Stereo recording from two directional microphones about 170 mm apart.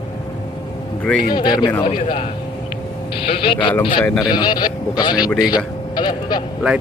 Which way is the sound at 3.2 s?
30° left (ahead or behind).